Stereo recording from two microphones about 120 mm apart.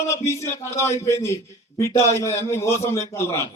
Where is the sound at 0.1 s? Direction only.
25° left (ahead or behind).